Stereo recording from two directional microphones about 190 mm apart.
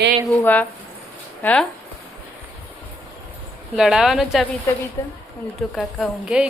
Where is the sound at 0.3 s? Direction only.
10° left (ahead or behind).